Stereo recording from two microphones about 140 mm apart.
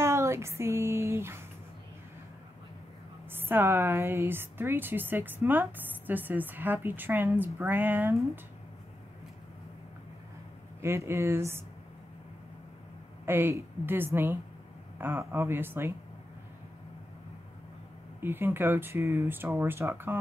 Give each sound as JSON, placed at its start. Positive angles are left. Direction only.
{"t": 0.0, "sound": "a sound", "side_deg": -20}
{"t": 3.3, "sound": "a woman's voice", "side_deg": -15}
{"t": 10.8, "sound": "a woman's voice", "side_deg": -20}
{"t": 13.2, "sound": "a woman's voice", "side_deg": -15}
{"t": 18.2, "sound": "a woman's voice", "side_deg": -15}